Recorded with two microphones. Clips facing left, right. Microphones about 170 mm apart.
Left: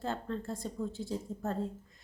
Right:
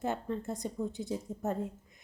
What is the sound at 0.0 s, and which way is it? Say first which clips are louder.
Speech: right 2 dB; 20° right (ahead or behind).